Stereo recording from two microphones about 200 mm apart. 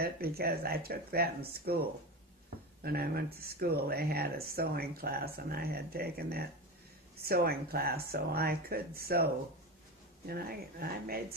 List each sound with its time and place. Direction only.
0.0 s speech: 50° right (ahead or behind)
2.8 s speech: 50° right (ahead or behind)